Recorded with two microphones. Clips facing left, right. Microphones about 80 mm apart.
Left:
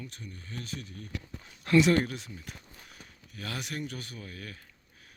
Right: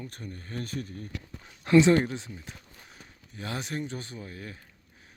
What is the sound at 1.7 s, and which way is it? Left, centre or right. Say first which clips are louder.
A man's voice: right 3 dB; right.